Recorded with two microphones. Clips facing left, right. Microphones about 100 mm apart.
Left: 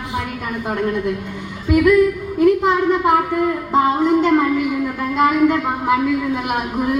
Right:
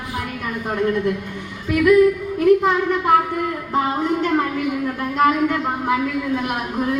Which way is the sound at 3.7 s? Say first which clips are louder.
Left 5 dB; 20° left (ahead or behind).